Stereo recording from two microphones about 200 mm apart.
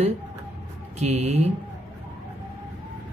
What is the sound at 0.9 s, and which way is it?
Speech, 35° right (ahead or behind).